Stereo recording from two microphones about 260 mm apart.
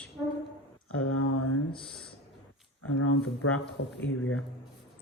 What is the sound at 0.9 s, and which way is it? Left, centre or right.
Mantra, left.